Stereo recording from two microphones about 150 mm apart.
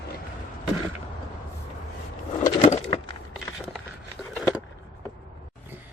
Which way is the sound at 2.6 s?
40° left (ahead or behind).